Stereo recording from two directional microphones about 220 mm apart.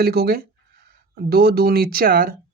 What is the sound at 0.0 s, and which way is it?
Speech, 45° right (ahead or behind).